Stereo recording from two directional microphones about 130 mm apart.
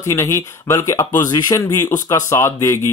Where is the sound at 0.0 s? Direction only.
20° left (ahead or behind).